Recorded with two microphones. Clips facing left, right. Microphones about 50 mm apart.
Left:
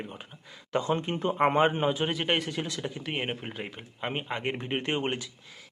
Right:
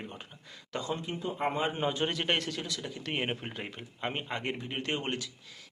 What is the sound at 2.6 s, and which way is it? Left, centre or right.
Speech, left.